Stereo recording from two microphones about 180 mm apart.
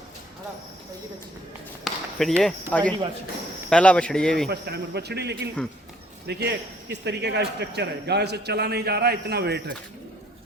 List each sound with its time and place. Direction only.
1.8 s a sound: centre (ahead or behind)
2.6 s speech: 10° left (ahead or behind)
4.4 s speech: 65° right (ahead or behind)